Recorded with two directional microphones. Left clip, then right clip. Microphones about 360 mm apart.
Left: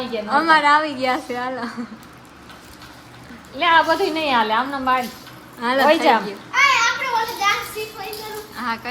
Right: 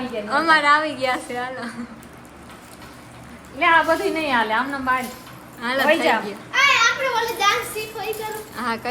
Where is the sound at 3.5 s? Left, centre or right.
Left.